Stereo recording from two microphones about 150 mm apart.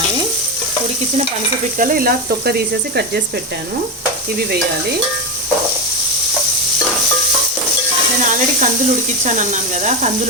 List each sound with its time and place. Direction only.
1.8 s speech: 70° right (ahead or behind)
8.2 s speech: 55° right (ahead or behind)